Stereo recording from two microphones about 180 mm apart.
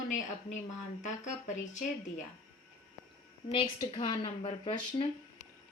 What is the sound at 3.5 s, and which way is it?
Speech, 30° left (ahead or behind).